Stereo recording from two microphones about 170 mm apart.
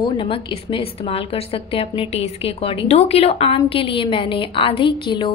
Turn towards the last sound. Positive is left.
turn(degrees=30)  # may be behind; listen again after turning